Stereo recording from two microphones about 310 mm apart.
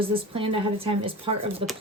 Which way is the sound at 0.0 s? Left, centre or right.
Centre.